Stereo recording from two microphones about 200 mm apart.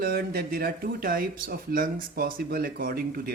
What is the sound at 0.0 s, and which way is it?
Speech, 50° right (ahead or behind).